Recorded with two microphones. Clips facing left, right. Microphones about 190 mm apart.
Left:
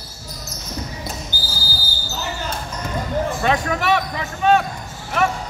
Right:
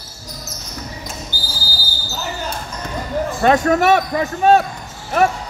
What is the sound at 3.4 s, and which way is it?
Basketball bounce, 50° right (ahead or behind).